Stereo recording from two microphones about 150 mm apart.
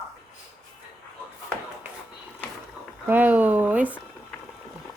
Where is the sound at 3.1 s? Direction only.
10° right (ahead or behind).